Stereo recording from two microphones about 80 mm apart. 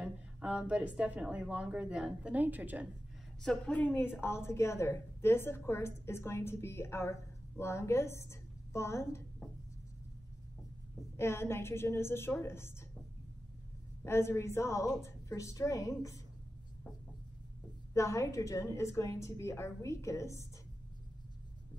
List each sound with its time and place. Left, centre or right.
0.0 s a woman's voice: centre
3.4 s a woman's voice: centre; by 9.2 s left
11.1 s a woman's voice: left
14.0 s a woman's voice: left
17.9 s a woman's voice: left